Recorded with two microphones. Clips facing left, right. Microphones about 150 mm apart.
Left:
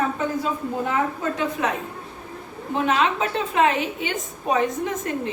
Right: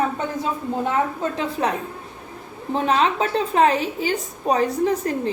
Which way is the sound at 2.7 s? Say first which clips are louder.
Right 2 dB; 35° right (ahead or behind).